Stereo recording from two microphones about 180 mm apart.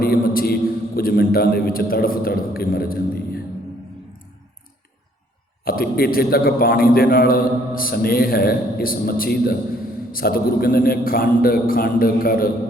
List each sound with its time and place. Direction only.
0.0 s a man's voice: 55° left (ahead or behind)
5.6 s a man's voice: 55° left (ahead or behind)